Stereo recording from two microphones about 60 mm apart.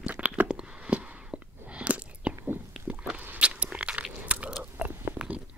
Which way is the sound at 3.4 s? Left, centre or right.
Centre.